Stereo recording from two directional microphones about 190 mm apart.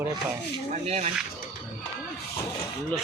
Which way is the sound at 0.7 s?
35° right (ahead or behind).